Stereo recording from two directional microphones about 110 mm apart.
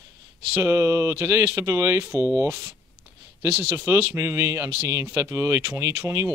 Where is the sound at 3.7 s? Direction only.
25° right (ahead or behind).